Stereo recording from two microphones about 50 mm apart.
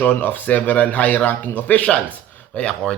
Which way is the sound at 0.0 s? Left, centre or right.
Left.